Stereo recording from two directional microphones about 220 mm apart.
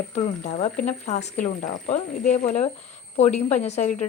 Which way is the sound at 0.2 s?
35° left (ahead or behind).